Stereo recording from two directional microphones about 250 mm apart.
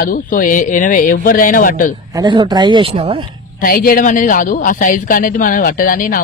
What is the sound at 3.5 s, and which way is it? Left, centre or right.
Speech, left.